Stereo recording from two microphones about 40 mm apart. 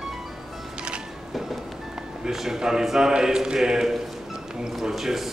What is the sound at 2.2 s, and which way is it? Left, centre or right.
Speech, centre.